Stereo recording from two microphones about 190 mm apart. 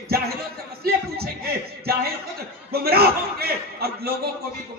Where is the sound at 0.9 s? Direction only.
55° right (ahead or behind).